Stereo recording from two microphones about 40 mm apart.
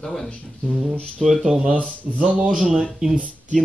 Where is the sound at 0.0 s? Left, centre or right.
Centre.